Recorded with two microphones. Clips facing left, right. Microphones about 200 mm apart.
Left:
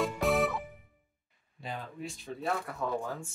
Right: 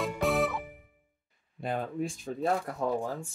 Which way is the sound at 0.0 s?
Centre (ahead or behind).